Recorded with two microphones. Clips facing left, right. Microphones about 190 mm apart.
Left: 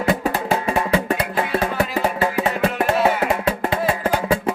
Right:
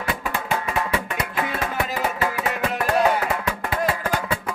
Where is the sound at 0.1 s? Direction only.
40° left (ahead or behind).